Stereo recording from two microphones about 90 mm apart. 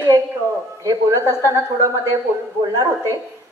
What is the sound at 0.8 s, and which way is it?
A woman's voice, 35° right (ahead or behind).